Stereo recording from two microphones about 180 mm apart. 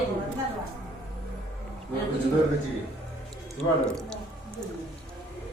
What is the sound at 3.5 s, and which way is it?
Speech, 5° left (ahead or behind).